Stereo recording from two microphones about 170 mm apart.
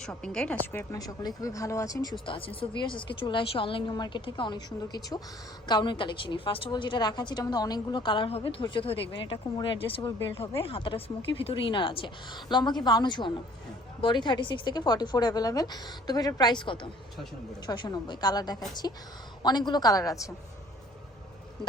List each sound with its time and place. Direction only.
0.0 s a woman's voice: 5° left (ahead or behind); by 2.1 s 20° left (ahead or behind)
2.2 s a woman's voice: 30° left (ahead or behind)